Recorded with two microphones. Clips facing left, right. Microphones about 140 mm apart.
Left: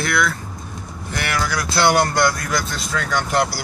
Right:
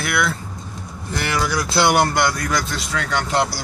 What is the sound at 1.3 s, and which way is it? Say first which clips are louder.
Speech: right 2 dB; 20° right (ahead or behind).